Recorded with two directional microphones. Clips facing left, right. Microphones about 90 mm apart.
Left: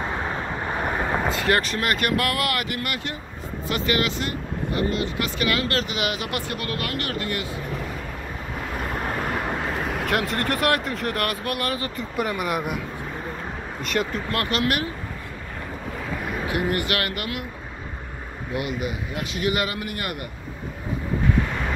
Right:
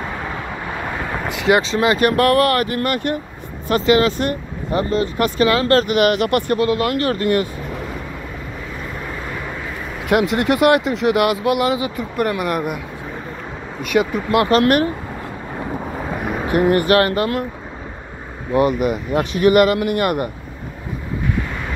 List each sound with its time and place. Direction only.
0.2 s vehicle: 25° left (ahead or behind)
1.3 s speech: 15° right (ahead or behind)
2.0 s speech: 35° right (ahead or behind)
3.8 s speech: 25° right (ahead or behind)
4.7 s speech: 40° right (ahead or behind)
6.6 s speech: 25° right (ahead or behind)
9.0 s vehicle: 55° left (ahead or behind)
10.0 s speech: 5° right (ahead or behind)
12.0 s speech: centre (ahead or behind)
13.9 s speech: 15° right (ahead or behind)
14.6 s speech: 45° right (ahead or behind)
16.4 s speech: 45° right (ahead or behind)
18.8 s speech: 50° right (ahead or behind)